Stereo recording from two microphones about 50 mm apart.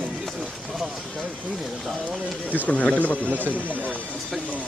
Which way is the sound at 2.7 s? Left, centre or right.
Left.